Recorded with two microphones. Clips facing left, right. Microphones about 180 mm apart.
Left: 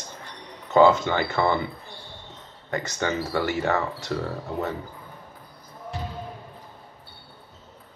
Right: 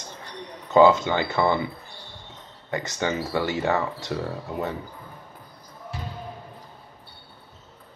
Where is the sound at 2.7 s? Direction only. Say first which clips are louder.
Even; 15° right (ahead or behind).